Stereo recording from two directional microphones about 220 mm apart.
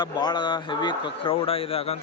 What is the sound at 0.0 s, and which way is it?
Speech, 20° left (ahead or behind).